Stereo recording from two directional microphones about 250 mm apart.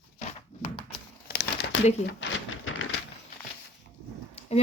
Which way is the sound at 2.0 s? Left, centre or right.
Left.